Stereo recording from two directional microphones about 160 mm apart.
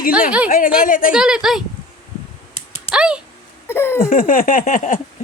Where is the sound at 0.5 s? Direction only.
60° left (ahead or behind).